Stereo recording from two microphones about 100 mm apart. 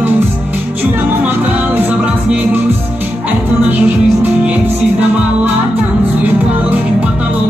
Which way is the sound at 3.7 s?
15° right (ahead or behind).